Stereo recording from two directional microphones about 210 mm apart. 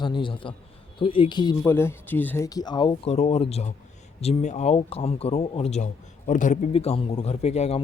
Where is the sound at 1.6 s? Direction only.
10° left (ahead or behind).